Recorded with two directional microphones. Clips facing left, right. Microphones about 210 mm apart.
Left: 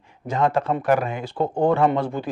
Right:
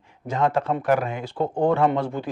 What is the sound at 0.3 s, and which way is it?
A man's voice, 15° left (ahead or behind).